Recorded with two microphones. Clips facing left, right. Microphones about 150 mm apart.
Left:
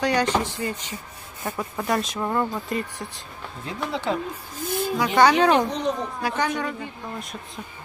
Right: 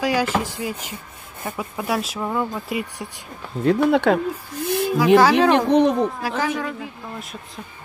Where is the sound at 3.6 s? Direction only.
65° right (ahead or behind).